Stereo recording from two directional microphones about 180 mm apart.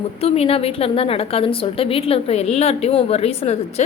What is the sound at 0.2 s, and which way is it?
A woman's voice, 35° left (ahead or behind).